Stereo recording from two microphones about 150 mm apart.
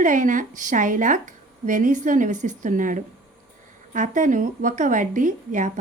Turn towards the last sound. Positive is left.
turn(degrees=-60)  # may be behind; listen again after turning